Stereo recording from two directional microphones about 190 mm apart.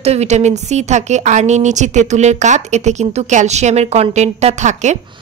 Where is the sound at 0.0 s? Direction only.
35° right (ahead or behind).